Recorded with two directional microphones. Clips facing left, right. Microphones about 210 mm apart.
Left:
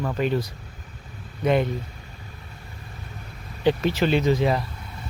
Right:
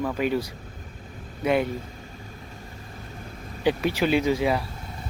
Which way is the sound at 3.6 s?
10° right (ahead or behind).